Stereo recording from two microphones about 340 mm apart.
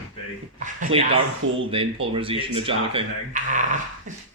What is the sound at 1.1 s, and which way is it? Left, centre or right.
Speech, right.